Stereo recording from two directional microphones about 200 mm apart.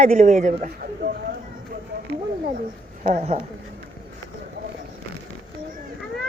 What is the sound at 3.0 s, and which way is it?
Speech, 35° right (ahead or behind).